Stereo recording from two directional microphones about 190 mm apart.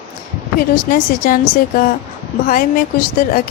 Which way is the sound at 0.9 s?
50° left (ahead or behind).